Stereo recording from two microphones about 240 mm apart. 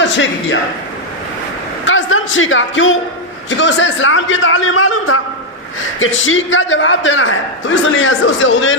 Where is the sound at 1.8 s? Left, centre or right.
Left.